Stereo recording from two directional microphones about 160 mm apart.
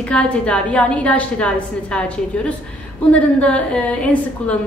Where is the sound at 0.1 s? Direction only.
10° left (ahead or behind).